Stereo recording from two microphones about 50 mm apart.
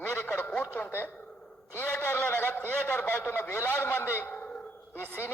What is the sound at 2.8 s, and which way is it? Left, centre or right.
A man's voice, left.